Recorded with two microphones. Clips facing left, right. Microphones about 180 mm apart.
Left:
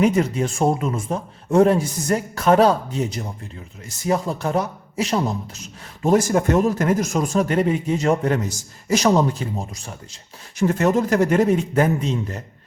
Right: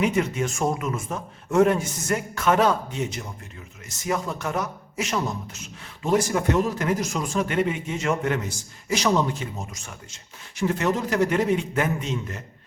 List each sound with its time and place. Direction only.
0.0 s a man's voice: 35° left (ahead or behind)
10.6 s a man's voice: 45° left (ahead or behind)